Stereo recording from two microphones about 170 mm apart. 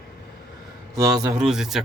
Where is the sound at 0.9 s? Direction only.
20° right (ahead or behind).